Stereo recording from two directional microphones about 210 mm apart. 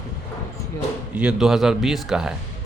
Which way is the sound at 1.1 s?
5° right (ahead or behind).